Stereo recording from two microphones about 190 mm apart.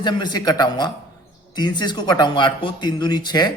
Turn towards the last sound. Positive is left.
turn(degrees=20)  # may be behind; listen again after turning